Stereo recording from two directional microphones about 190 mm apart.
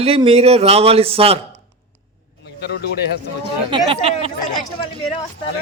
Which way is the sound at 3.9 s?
30° right (ahead or behind).